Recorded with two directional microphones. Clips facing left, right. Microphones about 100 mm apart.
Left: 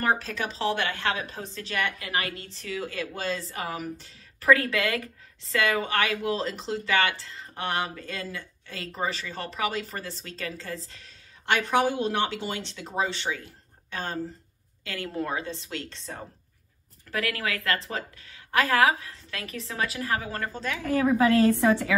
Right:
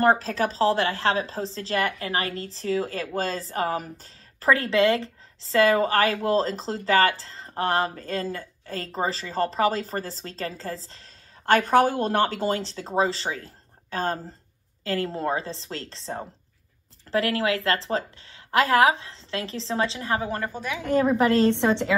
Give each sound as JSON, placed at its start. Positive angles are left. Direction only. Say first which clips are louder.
{"t": 0.0, "sound": "a woman's voice", "louder": "right 6 dB", "side_deg": -35}